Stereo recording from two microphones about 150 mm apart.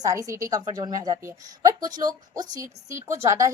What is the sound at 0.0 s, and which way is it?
A woman's voice, 20° right (ahead or behind).